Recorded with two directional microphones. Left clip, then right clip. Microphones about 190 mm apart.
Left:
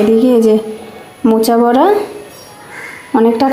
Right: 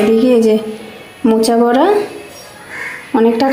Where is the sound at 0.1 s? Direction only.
5° left (ahead or behind).